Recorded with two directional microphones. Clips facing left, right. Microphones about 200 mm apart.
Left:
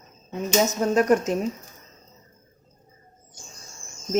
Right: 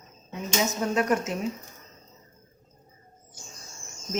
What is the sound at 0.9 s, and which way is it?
Speech, 40° left (ahead or behind).